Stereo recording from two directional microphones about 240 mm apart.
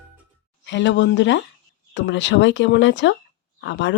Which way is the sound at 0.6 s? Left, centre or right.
Left.